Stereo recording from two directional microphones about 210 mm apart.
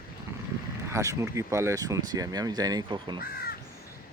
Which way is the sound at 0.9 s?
15° right (ahead or behind).